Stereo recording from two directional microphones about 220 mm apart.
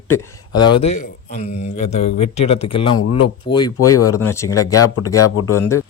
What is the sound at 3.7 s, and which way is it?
Speech, 90° left.